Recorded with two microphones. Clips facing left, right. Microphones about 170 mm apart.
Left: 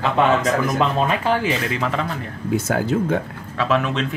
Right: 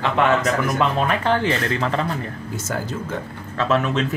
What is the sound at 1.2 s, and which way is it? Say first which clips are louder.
Speech: even; 10° left (ahead or behind).